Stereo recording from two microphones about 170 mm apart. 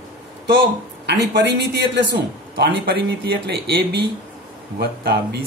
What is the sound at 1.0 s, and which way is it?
A man's voice, 80° right.